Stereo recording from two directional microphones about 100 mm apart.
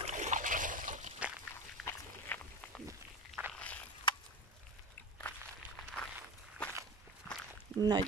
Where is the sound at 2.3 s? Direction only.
15° left (ahead or behind).